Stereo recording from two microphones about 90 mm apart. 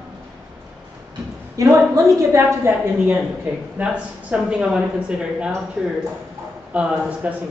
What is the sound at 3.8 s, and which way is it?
Speech, 15° right (ahead or behind).